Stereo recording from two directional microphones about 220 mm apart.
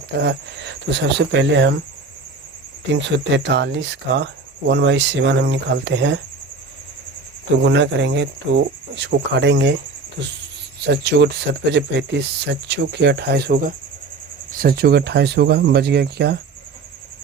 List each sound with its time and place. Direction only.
0.2 s speech: 50° right (ahead or behind)
3.3 s speech: 55° right (ahead or behind)
7.6 s speech: 55° right (ahead or behind)
10.8 s speech: 50° right (ahead or behind)